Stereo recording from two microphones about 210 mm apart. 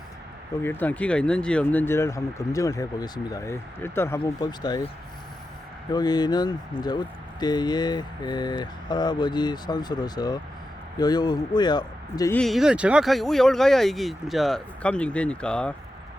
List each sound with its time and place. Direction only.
0.6 s speech: 10° left (ahead or behind)
5.9 s speech: 20° left (ahead or behind)
12.4 s speech: centre (ahead or behind)